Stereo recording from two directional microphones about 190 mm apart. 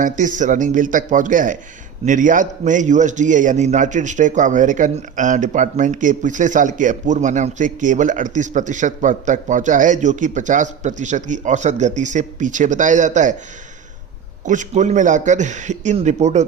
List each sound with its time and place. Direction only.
0.0 s a man's voice: 40° right (ahead or behind)
14.4 s a man's voice: 40° right (ahead or behind)